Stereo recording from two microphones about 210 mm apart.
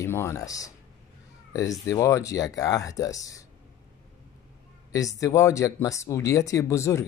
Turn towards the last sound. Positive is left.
turn(degrees=15)  # may be behind; listen again after turning